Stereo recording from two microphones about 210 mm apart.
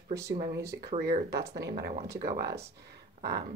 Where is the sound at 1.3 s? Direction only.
50° right (ahead or behind).